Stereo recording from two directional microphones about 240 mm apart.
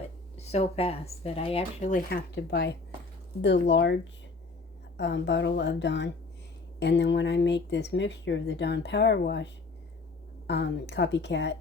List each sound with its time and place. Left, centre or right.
0.3 s speech: left